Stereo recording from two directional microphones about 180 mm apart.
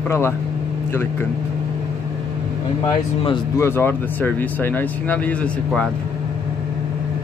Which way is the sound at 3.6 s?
15° left (ahead or behind).